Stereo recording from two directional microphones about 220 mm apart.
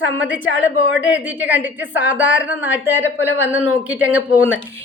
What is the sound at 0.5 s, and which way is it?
Speech, 60° left (ahead or behind).